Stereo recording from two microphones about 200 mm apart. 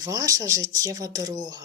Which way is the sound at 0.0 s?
15° right (ahead or behind).